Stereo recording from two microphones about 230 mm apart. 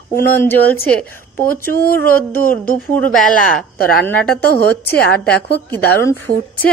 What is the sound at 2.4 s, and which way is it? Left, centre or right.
Speech, left.